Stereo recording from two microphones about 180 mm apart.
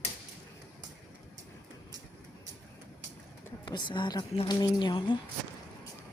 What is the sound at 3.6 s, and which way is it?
A woman's voice, 25° left (ahead or behind).